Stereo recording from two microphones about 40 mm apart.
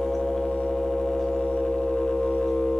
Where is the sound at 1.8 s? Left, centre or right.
Centre.